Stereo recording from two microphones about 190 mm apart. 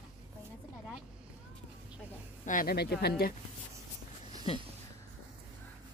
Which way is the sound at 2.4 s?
45° left (ahead or behind).